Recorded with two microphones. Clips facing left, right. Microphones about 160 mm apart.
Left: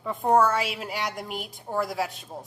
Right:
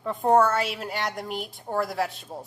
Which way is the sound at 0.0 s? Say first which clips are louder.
Right 1 dB; centre (ahead or behind).